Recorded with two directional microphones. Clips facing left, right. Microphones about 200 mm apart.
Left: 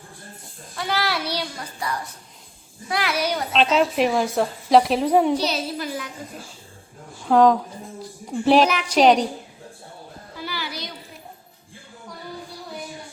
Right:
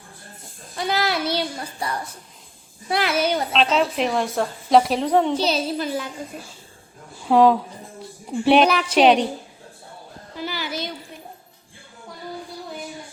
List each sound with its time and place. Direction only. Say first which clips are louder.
0.8 s a child's voice: right 2 dB; 20° right (ahead or behind)
2.9 s music: right 3 dB; 25° right (ahead or behind)
3.5 s a woman's voice: left 1 dB; centre (ahead or behind)
5.4 s music: right 3 dB; 25° right (ahead or behind)
7.3 s a woman's voice: even; 5° right (ahead or behind)
10.4 s a sound: right 4 dB; 20° right (ahead or behind)